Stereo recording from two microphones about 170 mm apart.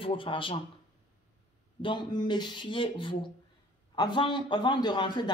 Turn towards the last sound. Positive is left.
turn(degrees=25)  # may be behind; listen again after turning